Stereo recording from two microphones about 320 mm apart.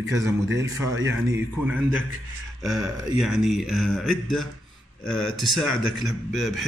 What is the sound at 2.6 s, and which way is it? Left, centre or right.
A man's voice, centre.